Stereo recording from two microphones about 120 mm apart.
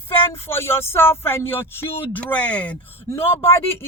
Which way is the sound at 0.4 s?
20° left (ahead or behind).